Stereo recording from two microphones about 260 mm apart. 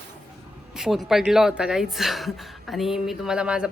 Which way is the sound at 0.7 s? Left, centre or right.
Centre.